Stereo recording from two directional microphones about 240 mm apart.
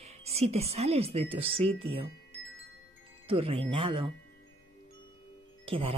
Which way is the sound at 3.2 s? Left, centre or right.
Right.